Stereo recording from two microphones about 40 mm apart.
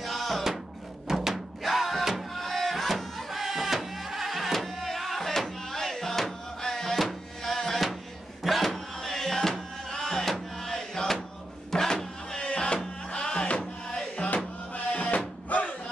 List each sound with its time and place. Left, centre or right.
0.0 s music: centre
14.1 s music: left